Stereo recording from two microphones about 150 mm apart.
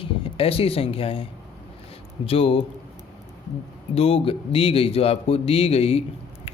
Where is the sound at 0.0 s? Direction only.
40° left (ahead or behind).